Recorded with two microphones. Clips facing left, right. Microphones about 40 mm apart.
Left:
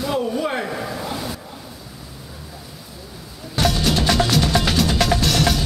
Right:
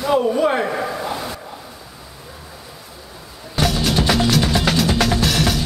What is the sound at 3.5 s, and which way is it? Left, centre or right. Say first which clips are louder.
Music: right 1 dB; centre.